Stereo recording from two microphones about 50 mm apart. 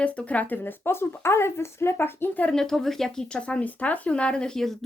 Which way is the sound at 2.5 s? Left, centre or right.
Centre.